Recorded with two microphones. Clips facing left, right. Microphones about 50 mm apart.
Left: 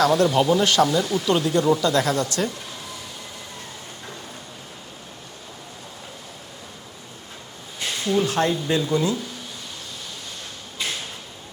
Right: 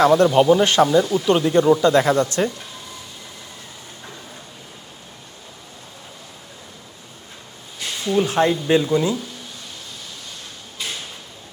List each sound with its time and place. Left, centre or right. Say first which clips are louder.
0.0 s speech: right 4 dB; right
1.0 s speech: right 3 dB; centre
8.0 s speech: right 3 dB; centre